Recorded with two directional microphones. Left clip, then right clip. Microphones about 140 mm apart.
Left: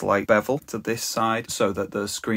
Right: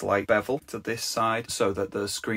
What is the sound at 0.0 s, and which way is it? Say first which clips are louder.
Speech: left 4 dB; 40° left (ahead or behind).